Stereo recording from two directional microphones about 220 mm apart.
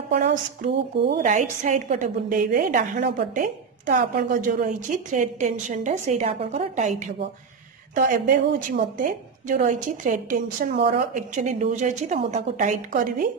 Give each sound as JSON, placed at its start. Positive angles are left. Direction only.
{"t": 0.1, "sound": "a woman's voice", "side_deg": -35}